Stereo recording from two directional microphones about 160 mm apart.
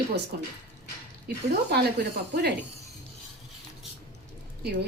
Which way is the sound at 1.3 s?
85° right.